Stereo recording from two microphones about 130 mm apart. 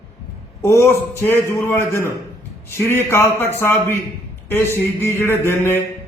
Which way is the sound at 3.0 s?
20° left (ahead or behind).